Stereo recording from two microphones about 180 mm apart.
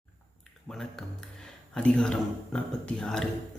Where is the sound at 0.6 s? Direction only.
5° left (ahead or behind).